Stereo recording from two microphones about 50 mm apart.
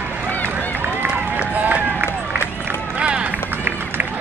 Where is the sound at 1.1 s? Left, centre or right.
Right.